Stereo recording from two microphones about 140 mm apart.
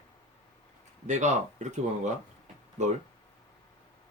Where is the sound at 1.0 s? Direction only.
60° right (ahead or behind).